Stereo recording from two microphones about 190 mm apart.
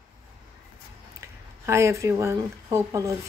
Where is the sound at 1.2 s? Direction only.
15° right (ahead or behind).